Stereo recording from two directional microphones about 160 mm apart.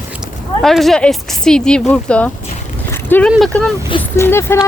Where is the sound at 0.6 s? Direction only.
Centre (ahead or behind).